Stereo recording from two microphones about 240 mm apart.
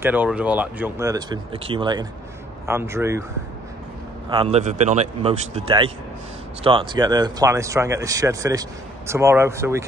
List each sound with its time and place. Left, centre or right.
0.0 s speech: centre
4.3 s a man's voice: right